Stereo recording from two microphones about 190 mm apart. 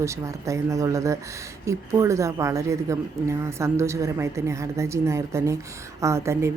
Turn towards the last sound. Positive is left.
turn(degrees=-15)  # may be behind; listen again after turning